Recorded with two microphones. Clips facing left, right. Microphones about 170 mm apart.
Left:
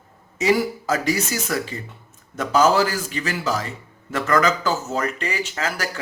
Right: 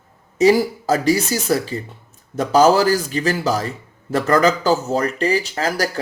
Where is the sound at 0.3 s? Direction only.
35° right (ahead or behind).